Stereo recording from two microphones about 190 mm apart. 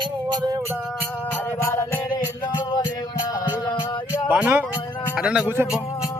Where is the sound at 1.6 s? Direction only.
15° left (ahead or behind).